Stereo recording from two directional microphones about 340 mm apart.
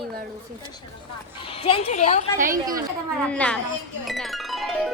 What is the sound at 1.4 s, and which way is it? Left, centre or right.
Speech, centre.